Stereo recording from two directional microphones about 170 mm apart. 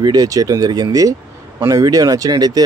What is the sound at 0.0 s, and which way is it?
Speech, 20° right (ahead or behind).